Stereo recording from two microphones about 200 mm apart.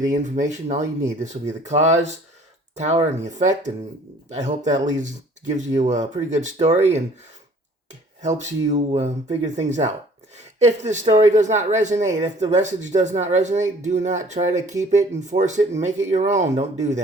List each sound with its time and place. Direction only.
0.1 s speech: 40° right (ahead or behind)
10.3 s a sound: 35° right (ahead or behind)
11.0 s speech: 35° right (ahead or behind)